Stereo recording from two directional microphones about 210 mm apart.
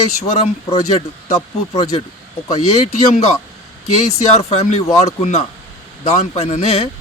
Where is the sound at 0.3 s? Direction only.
30° left (ahead or behind).